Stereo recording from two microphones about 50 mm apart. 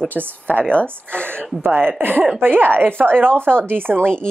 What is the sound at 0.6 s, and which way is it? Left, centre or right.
Speech, left.